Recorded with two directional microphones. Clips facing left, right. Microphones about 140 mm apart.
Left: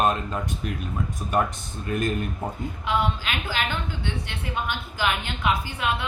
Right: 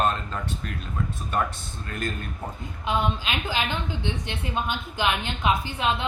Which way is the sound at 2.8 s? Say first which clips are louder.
Even; 20° right (ahead or behind).